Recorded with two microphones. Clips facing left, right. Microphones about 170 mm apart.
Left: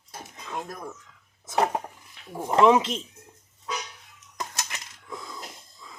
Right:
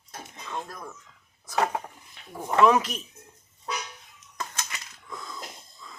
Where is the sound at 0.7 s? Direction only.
15° left (ahead or behind).